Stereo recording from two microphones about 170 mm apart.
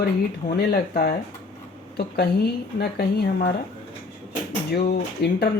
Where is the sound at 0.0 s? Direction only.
70° left (ahead or behind).